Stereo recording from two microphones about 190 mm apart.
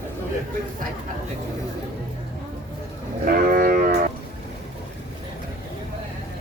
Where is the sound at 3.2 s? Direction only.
50° right (ahead or behind).